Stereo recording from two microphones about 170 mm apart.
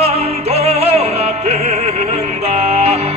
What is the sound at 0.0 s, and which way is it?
Music, 35° right (ahead or behind).